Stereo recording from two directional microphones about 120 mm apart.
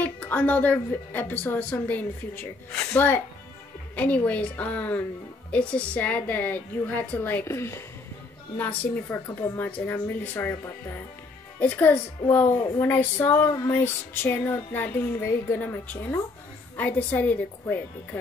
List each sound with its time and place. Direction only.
0.0 s female singing: 15° left (ahead or behind)